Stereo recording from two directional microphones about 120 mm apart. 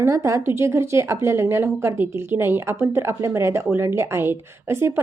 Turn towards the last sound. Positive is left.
turn(degrees=-20)  # may be behind; listen again after turning